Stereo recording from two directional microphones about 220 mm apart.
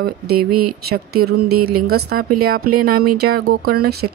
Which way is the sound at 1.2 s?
45° right (ahead or behind).